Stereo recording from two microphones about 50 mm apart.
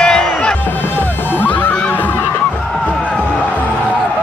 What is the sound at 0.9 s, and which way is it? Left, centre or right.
Music, left.